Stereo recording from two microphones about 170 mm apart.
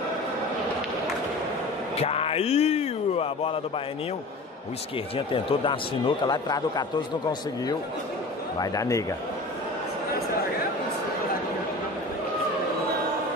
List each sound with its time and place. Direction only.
2.0 s speech: 35° left (ahead or behind)
5.1 s speech: 30° left (ahead or behind)
8.5 s speech: 20° left (ahead or behind)